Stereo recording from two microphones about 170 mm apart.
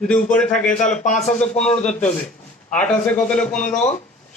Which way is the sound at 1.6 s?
40° left (ahead or behind).